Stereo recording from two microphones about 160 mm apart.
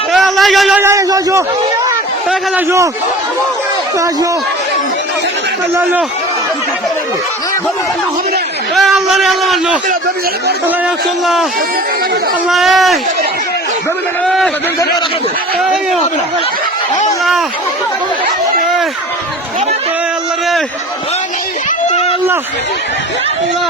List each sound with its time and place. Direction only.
0.1 s a sound: centre (ahead or behind)
0.8 s a man's voice: 20° right (ahead or behind)
5.7 s a man's voice: 10° right (ahead or behind)
8.7 s a man's voice: centre (ahead or behind)
12.5 s a man's voice: centre (ahead or behind)
14.3 s a man's voice: 5° left (ahead or behind)
15.6 s a man's voice: centre (ahead or behind)
21.8 s a sound: 45° left (ahead or behind)